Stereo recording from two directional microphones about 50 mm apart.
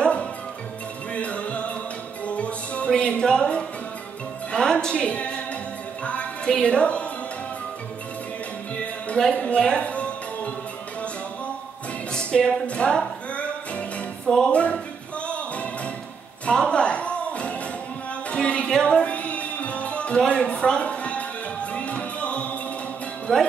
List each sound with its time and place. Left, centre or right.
0.0 s music: left
2.9 s a sound: centre
4.5 s music: centre
8.7 s music: left
12.1 s music: centre
23.3 s speech: centre